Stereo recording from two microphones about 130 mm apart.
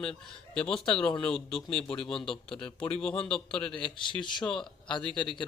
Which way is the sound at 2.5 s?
40° left (ahead or behind).